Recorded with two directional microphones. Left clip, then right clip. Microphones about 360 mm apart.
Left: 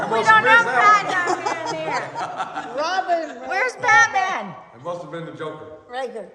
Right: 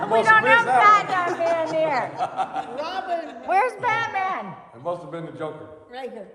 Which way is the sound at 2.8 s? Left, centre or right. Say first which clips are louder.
Left 8 dB; centre.